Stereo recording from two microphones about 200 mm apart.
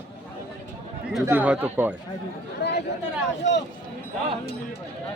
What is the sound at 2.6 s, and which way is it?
Speech, 55° left (ahead or behind).